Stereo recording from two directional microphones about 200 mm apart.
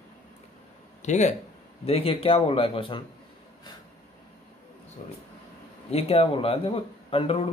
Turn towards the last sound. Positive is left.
turn(degrees=25)  # may be behind; listen again after turning